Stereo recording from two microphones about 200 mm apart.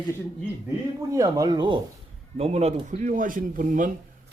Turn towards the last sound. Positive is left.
turn(degrees=-40)  # may be behind; listen again after turning